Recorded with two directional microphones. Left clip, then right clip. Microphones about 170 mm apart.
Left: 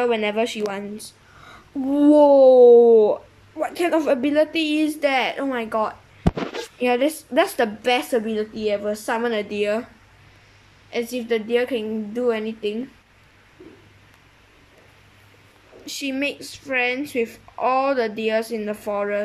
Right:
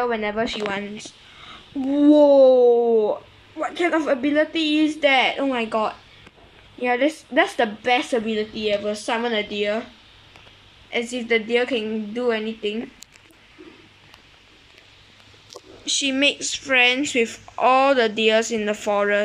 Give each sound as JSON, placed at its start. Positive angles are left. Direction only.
{"t": 0.0, "sound": "speech", "side_deg": 15}
{"t": 6.8, "sound": "speech", "side_deg": 10}
{"t": 10.9, "sound": "speech", "side_deg": 10}
{"t": 15.8, "sound": "speech", "side_deg": 5}